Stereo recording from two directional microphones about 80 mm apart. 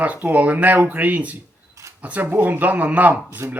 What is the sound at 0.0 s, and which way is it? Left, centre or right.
Speech, centre.